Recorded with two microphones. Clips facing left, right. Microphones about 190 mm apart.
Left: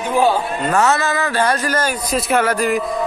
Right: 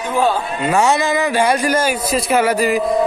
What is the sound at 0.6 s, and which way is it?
Speech, 10° right (ahead or behind).